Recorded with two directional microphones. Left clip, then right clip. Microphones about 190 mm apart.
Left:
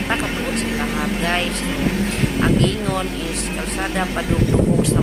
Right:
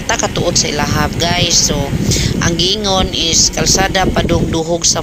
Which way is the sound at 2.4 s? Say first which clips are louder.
Right 5 dB; 30° right (ahead or behind).